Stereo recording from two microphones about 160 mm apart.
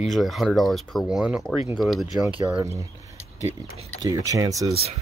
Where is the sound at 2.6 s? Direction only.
20° right (ahead or behind).